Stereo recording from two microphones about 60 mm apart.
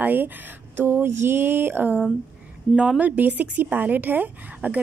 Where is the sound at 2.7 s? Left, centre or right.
Centre.